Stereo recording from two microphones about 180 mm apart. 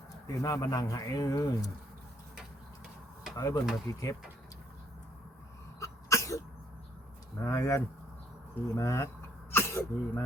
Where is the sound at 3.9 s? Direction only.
20° left (ahead or behind).